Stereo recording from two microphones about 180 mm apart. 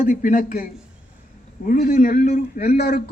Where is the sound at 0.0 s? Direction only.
45° left (ahead or behind).